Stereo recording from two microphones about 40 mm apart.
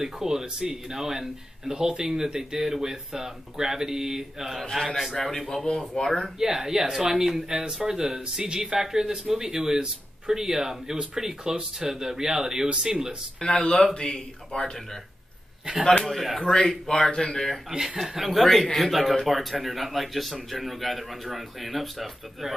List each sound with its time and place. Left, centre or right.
0.0 s speech: centre
6.4 s speech: centre
13.4 s speech: left
16.0 s speech: centre
16.8 s speech: centre
17.6 s speech: centre
18.3 s speech: centre